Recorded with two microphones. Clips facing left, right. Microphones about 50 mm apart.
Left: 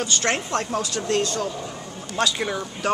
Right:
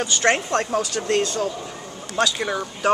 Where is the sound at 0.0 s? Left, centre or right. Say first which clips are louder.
Right 4 dB; centre.